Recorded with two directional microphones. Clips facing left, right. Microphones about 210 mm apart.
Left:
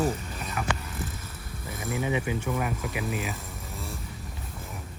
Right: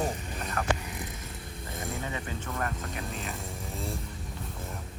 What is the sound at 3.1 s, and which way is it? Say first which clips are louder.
Speech: left 5 dB; 5° left (ahead or behind).